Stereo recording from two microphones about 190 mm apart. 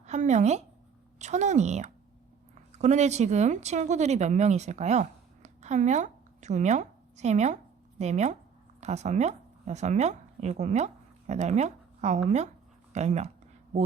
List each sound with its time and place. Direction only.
0.0 s speech: 35° right (ahead or behind)